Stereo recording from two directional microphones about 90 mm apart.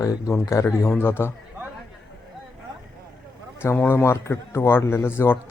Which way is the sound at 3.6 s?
25° left (ahead or behind).